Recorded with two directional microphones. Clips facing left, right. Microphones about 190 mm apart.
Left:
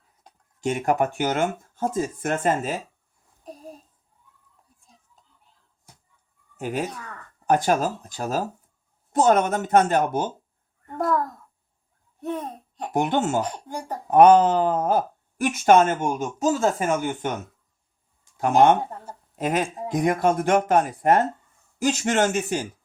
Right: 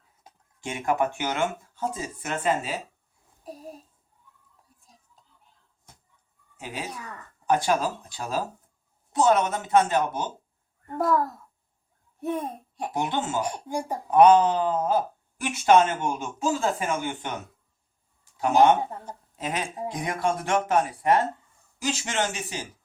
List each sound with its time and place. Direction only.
0.6 s speech: 45° left (ahead or behind)
3.4 s a sound: 5° right (ahead or behind)
6.6 s speech: 50° left (ahead or behind)
6.9 s speech: 10° right (ahead or behind)
7.4 s speech: 45° left (ahead or behind)
10.8 s a child's voice: 5° right (ahead or behind)
12.2 s laughter: 10° right (ahead or behind)
12.9 s speech: 50° left (ahead or behind)
13.4 s speech: 10° right (ahead or behind)
14.1 s speech: 50° left (ahead or behind)
18.3 s speech: 50° left (ahead or behind)